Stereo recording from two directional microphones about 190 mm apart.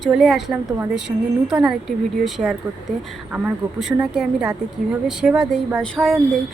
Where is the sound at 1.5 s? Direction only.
5° right (ahead or behind).